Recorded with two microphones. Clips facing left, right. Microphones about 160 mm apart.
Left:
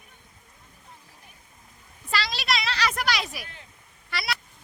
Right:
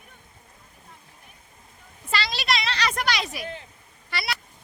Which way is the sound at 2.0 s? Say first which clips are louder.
Right 1 dB; centre (ahead or behind).